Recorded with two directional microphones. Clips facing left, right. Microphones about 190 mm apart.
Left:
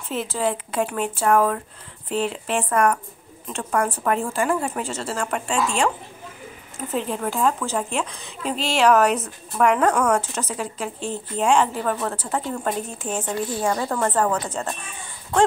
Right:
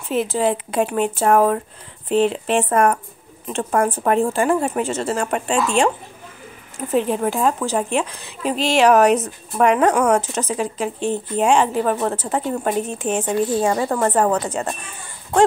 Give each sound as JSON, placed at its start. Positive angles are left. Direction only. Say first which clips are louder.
{"t": 0.1, "sound": "a woman's voice", "louder": "right 5 dB", "side_deg": -15}
{"t": 6.9, "sound": "speech", "louder": "right 6 dB", "side_deg": -15}
{"t": 8.1, "sound": "speech", "louder": "right 1 dB", "side_deg": -5}
{"t": 8.4, "sound": "a woman's voice", "louder": "right 5 dB", "side_deg": -15}